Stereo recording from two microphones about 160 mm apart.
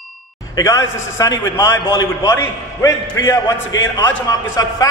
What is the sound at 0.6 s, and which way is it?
A man's voice, 20° left (ahead or behind).